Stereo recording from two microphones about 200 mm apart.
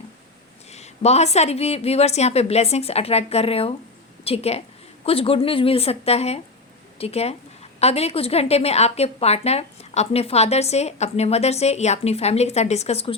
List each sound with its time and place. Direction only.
0.7 s a woman's voice: 35° left (ahead or behind)